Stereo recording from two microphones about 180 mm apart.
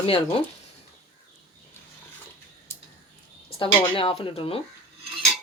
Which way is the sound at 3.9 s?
30° left (ahead or behind).